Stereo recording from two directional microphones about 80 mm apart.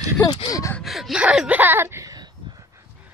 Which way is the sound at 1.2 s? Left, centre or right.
Centre.